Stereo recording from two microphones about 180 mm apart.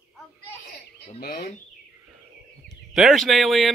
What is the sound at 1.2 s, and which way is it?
Speech, 60° left (ahead or behind).